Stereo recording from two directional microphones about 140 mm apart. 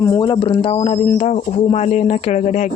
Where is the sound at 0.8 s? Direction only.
50° left (ahead or behind).